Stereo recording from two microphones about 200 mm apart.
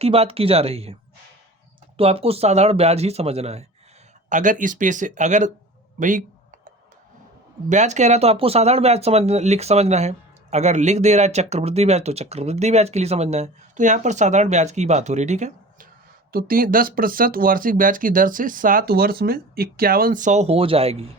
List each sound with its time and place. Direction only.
0.0 s speech: 30° right (ahead or behind)
2.0 s speech: 30° right (ahead or behind)
6.0 s a sound: 40° right (ahead or behind)
7.7 s speech: 35° right (ahead or behind)
16.3 s speech: 45° right (ahead or behind); by 21.1 s 30° right (ahead or behind)